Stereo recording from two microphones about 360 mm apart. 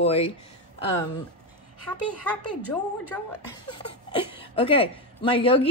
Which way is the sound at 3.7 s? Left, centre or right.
Centre.